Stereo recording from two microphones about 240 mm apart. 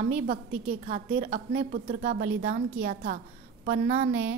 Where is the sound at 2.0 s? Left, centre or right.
Right.